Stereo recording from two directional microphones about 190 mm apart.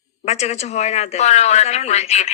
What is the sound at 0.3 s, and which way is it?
A woman's voice, 35° left (ahead or behind).